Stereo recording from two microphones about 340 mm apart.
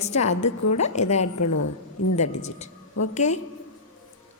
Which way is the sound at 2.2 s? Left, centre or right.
Centre.